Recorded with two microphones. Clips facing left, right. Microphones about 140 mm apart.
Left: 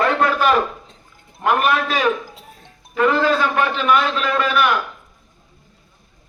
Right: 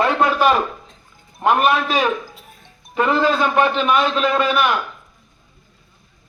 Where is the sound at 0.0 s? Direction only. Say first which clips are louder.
Right 1 dB; 20° right (ahead or behind).